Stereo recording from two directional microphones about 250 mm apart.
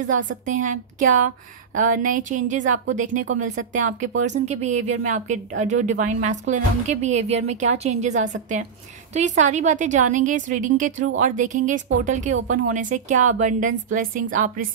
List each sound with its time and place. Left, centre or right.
0.0 s a woman's voice: right